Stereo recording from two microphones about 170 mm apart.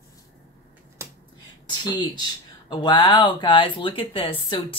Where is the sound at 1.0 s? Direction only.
15° right (ahead or behind).